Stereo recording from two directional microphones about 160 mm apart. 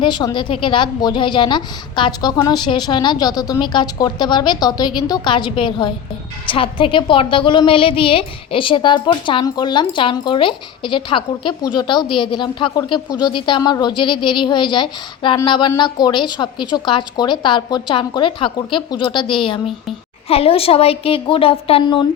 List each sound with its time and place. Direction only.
0.0 s a woman's voice: 25° left (ahead or behind)